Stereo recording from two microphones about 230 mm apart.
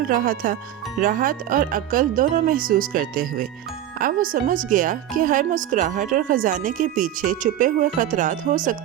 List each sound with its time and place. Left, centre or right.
0.1 s a woman's voice: right